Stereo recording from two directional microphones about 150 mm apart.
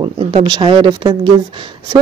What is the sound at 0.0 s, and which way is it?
Speech, 35° right (ahead or behind).